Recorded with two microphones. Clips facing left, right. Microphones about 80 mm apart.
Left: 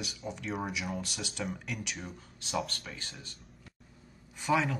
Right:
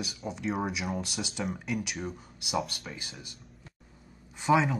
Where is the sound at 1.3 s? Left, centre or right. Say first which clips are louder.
Right 2 dB; centre.